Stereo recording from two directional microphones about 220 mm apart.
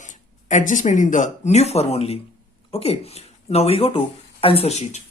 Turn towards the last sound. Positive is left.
turn(degrees=30)  # may be behind; listen again after turning